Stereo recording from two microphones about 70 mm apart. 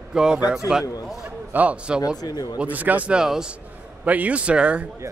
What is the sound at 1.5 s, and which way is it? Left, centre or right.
Speech, right.